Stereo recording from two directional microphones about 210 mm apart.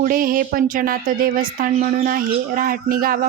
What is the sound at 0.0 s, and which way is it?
A woman's voice, 40° right (ahead or behind).